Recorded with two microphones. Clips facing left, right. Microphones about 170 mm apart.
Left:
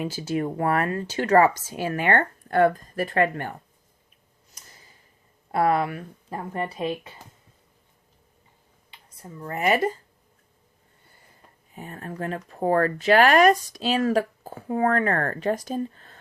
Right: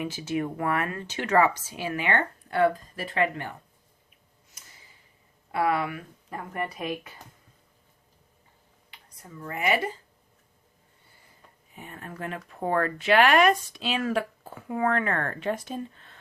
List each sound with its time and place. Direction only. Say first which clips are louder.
0.0 s speech: left 3 dB; 35° left (ahead or behind)
5.5 s speech: left 4 dB; 40° left (ahead or behind)
8.9 s a sound: left 4 dB; 25° left (ahead or behind)
9.5 s speech: left 4 dB; 40° left (ahead or behind)
11.7 s speech: left 5 dB; 40° left (ahead or behind)